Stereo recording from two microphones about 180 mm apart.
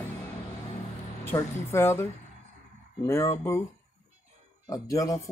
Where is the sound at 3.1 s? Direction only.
15° left (ahead or behind).